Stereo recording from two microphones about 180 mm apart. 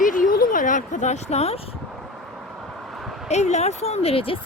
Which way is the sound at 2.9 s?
Centre (ahead or behind).